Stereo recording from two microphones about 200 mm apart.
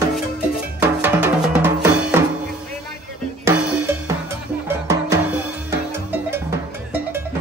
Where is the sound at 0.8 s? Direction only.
10° right (ahead or behind).